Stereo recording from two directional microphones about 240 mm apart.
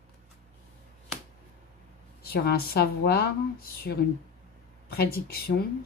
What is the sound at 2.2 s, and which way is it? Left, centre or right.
Speech, left.